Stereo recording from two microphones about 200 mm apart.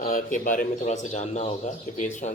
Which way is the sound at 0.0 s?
40° left (ahead or behind).